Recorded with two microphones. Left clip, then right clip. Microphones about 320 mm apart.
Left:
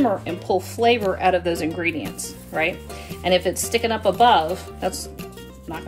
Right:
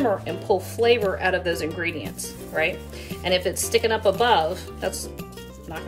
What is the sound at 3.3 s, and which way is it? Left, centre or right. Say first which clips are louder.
A woman's voice: left 3 dB; centre.